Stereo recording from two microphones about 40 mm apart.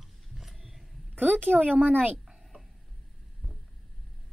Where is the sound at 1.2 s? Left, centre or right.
Right.